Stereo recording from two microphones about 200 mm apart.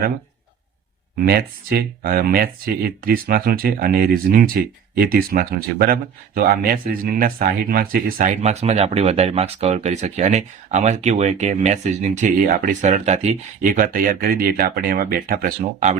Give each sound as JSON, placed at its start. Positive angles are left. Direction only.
{"t": 1.2, "sound": "speech", "side_deg": -50}
{"t": 8.4, "sound": "speech", "side_deg": -35}